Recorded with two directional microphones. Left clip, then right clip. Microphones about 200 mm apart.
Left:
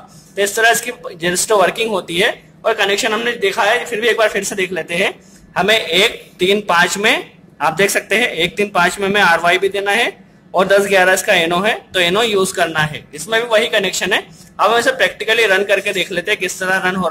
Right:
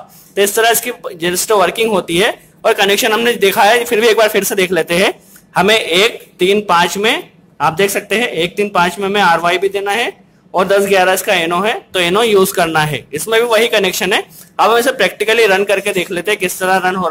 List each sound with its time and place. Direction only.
0.4 s speech: 25° right (ahead or behind)